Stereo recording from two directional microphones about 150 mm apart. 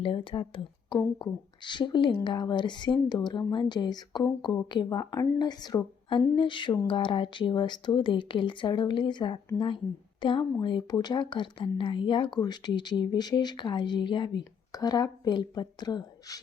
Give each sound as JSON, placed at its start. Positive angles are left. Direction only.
{"t": 0.0, "sound": "speech", "side_deg": 35}